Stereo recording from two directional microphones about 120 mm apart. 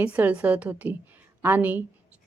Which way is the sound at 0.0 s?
15° right (ahead or behind).